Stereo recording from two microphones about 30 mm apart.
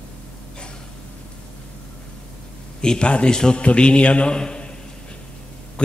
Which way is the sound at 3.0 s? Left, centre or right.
Left.